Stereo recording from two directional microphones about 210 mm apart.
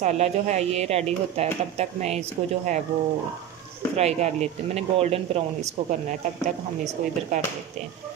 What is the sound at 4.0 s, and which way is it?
Speech, 30° right (ahead or behind).